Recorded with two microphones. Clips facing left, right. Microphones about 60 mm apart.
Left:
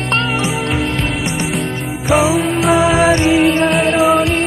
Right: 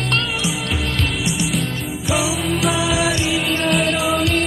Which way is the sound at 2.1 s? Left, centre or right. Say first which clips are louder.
Left 8 dB; left.